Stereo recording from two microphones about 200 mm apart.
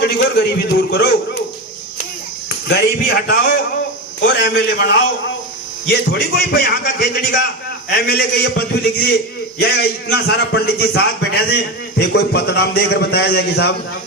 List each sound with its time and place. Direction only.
0.0 s a man's voice: 55° left (ahead or behind)
3.2 s a man's voice: 55° left (ahead or behind)